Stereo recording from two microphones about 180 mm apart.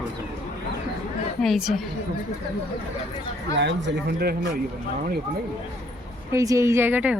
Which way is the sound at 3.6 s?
70° right (ahead or behind).